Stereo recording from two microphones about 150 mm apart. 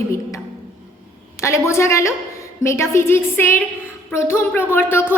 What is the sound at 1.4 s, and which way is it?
A woman's voice, 20° left (ahead or behind).